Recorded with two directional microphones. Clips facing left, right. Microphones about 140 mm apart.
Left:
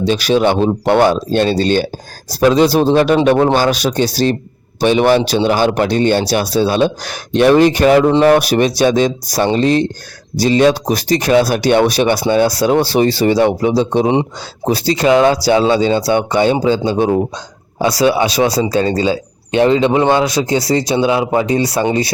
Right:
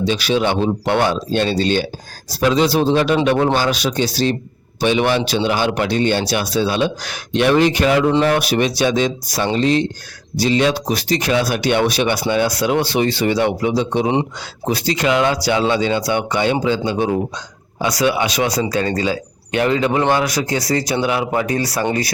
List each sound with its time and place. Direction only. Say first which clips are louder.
0.0 s a man's voice: left 5 dB; 40° left (ahead or behind); by 22.1 s 25° left (ahead or behind)